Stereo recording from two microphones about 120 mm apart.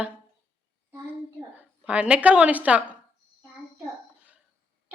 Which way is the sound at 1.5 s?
15° right (ahead or behind).